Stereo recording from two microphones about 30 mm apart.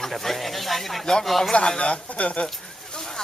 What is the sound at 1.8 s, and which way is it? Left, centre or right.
Speech, left.